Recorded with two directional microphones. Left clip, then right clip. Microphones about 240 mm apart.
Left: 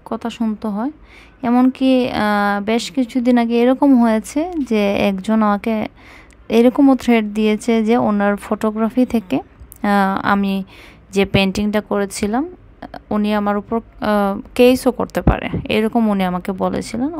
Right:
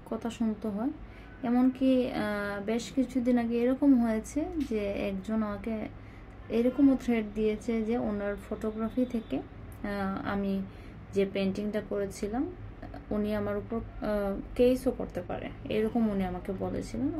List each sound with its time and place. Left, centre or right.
0.1 s a woman's voice: left